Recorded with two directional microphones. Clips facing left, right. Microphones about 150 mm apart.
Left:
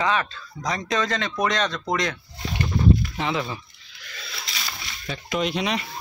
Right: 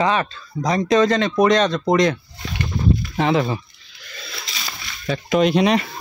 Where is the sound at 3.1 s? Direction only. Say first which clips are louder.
Right 8 dB; 45° right (ahead or behind).